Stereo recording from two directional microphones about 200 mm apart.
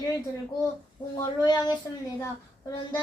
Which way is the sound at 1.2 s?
20° left (ahead or behind).